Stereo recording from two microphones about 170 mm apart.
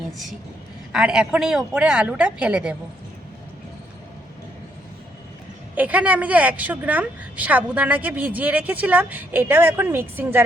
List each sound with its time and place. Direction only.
0.9 s speech: 5° right (ahead or behind)
5.7 s a woman's voice: 10° right (ahead or behind)